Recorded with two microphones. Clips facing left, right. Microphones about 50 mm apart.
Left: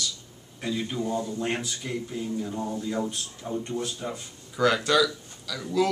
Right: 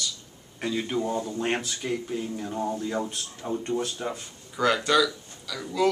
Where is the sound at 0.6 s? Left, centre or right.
Right.